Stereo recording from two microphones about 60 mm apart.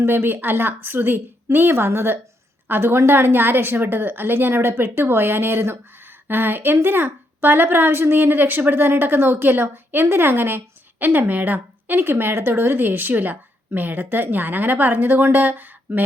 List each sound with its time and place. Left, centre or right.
0.0 s a woman's voice: right